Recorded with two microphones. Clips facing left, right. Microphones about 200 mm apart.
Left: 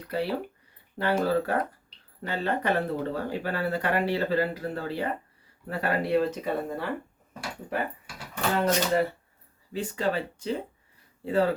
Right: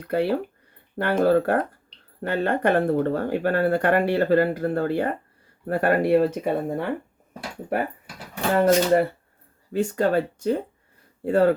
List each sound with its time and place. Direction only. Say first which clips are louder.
0.0 s speech: right 6 dB; 55° right (ahead or behind)
8.5 s speech: right 7 dB; 50° right (ahead or behind)